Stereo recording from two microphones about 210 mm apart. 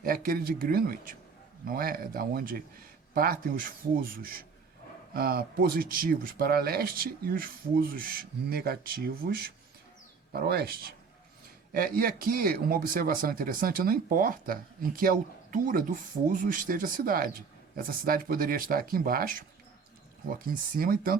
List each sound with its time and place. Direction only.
0.0 s a man's voice: 45° right (ahead or behind)
20.5 s a man's voice: 45° right (ahead or behind)